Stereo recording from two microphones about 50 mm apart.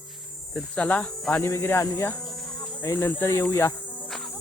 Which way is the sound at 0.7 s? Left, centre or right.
Left.